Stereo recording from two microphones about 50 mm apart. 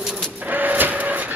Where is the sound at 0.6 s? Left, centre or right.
Right.